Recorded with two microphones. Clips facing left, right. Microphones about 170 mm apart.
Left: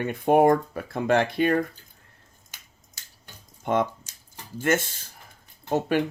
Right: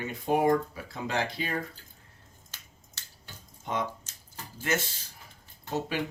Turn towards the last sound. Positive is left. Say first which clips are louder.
# left 8 dB
turn(degrees=55)  # may be behind; listen again after turning